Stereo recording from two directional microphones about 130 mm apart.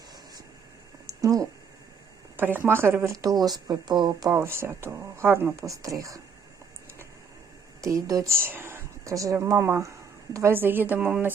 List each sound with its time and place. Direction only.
1.2 s a sound: 25° right (ahead or behind)
2.3 s speech: 15° right (ahead or behind)
7.8 s a woman's voice: 25° right (ahead or behind)